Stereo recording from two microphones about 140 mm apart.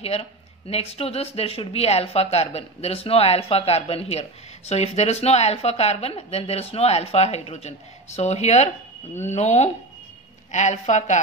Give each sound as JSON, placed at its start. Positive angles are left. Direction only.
{"t": 0.0, "sound": "speech", "side_deg": 45}